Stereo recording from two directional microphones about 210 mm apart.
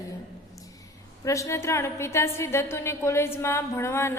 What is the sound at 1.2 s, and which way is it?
A woman's voice, 15° left (ahead or behind).